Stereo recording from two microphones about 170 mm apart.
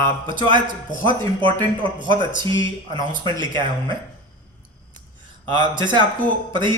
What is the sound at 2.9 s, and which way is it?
A man's voice, 25° right (ahead or behind).